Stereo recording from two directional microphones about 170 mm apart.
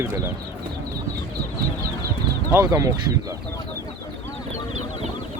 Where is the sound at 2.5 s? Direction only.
20° right (ahead or behind).